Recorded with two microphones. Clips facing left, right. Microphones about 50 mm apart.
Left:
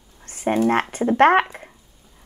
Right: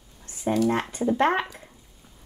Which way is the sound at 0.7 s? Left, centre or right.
Left.